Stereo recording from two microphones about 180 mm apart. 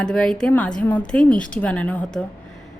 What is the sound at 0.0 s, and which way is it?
A woman's voice, 5° left (ahead or behind).